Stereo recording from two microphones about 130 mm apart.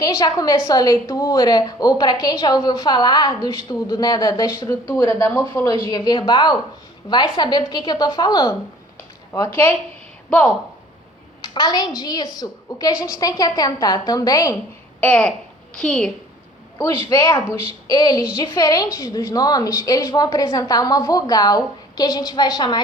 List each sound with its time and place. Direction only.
0.0 s a woman's voice: 30° left (ahead or behind)
10.2 s speech: 5° left (ahead or behind)
11.4 s a woman's voice: 30° left (ahead or behind)
15.0 s a child's voice: 10° left (ahead or behind)
16.7 s a woman's voice: 25° left (ahead or behind)